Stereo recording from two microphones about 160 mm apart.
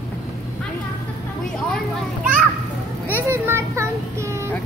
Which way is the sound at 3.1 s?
15° right (ahead or behind).